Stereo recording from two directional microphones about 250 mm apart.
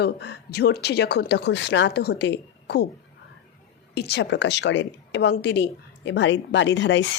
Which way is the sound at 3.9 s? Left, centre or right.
Left.